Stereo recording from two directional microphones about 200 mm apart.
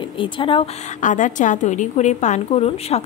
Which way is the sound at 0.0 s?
25° left (ahead or behind).